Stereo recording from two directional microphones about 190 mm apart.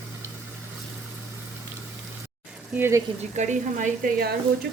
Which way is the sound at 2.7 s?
10° right (ahead or behind).